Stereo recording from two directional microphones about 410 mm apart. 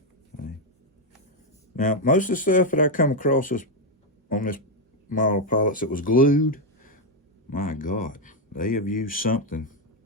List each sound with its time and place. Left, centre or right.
1.7 s speech: centre